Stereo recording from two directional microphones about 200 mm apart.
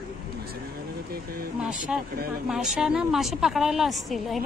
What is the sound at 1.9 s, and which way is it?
A woman's voice, 5° right (ahead or behind).